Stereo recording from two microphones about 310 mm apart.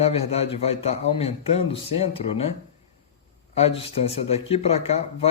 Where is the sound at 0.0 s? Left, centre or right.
Centre.